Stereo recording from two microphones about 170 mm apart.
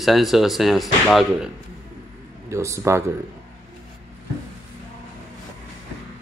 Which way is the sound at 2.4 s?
15° right (ahead or behind).